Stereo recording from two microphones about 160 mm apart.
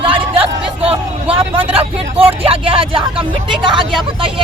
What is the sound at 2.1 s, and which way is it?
Speech, 35° right (ahead or behind).